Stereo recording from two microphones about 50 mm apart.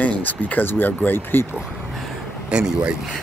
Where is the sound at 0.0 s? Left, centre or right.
Left.